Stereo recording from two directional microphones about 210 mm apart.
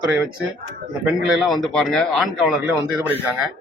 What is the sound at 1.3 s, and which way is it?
A man's voice, centre (ahead or behind).